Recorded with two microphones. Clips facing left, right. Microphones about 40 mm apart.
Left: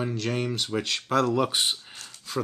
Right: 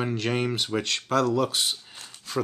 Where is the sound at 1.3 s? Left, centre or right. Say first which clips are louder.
Even; left.